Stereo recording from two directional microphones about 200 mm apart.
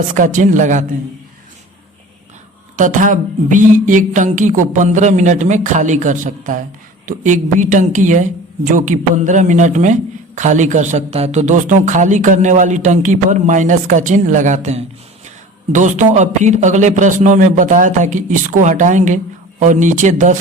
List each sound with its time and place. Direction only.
0.1 s speech: 40° right (ahead or behind)
2.7 s speech: 40° right (ahead or behind)